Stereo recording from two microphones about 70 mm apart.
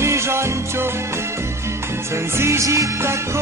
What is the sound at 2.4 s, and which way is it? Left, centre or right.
Music, right.